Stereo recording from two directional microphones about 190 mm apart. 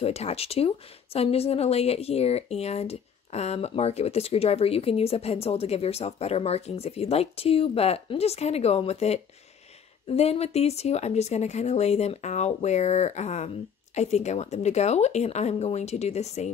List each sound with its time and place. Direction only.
0.0 s speech: 35° left (ahead or behind)